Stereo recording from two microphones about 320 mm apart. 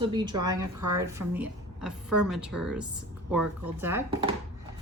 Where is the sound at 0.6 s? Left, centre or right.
Right.